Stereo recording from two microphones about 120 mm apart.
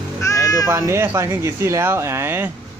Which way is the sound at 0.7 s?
25° right (ahead or behind).